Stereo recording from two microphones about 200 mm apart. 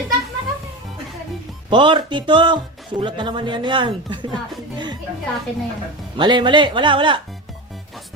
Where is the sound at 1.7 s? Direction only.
25° right (ahead or behind).